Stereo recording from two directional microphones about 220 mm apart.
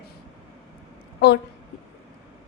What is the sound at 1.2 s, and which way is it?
Speech, 50° left (ahead or behind).